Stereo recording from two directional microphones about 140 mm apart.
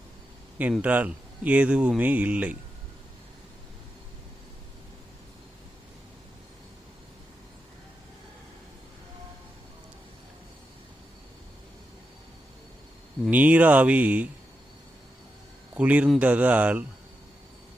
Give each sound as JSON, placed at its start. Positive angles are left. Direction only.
{"t": 0.7, "sound": "speech", "side_deg": -10}
{"t": 13.3, "sound": "speech", "side_deg": -10}
{"t": 15.7, "sound": "speech", "side_deg": -10}